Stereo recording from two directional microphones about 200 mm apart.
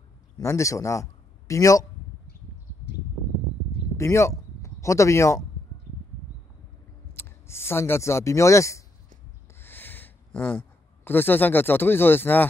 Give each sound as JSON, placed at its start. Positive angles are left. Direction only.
{"t": 0.4, "sound": "a man's voice", "side_deg": 15}
{"t": 3.9, "sound": "speech", "side_deg": 15}
{"t": 7.2, "sound": "speech", "side_deg": 10}
{"t": 9.6, "sound": "a sound", "side_deg": 10}